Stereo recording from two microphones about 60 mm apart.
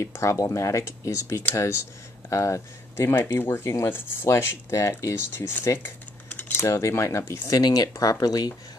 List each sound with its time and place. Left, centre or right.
0.0 s speech: left
4.6 s speech: left
6.5 s speech: left